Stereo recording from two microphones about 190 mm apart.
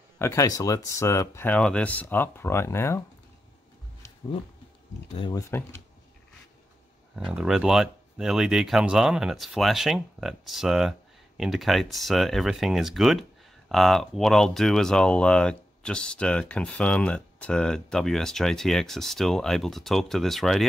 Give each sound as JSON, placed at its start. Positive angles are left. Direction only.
{"t": 0.2, "sound": "speech", "side_deg": 15}
{"t": 5.1, "sound": "speech", "side_deg": 25}
{"t": 7.2, "sound": "speech", "side_deg": -5}